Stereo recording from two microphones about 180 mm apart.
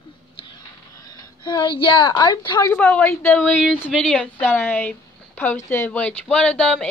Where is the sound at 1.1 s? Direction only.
25° left (ahead or behind).